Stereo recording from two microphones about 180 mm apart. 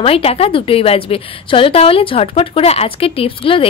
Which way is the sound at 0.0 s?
35° left (ahead or behind).